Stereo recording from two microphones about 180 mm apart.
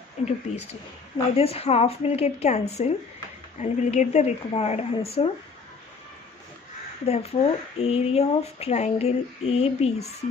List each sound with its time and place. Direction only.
0.2 s speech: 35° left (ahead or behind)
7.1 s speech: 35° left (ahead or behind)